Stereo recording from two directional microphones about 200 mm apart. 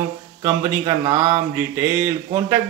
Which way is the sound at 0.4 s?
15° right (ahead or behind).